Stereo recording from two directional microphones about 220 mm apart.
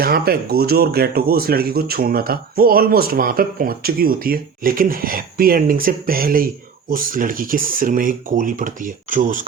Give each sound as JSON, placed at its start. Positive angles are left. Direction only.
{"t": 0.0, "sound": "speech", "side_deg": -45}